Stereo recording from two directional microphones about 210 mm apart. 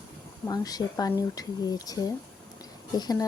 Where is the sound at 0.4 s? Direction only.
20° left (ahead or behind).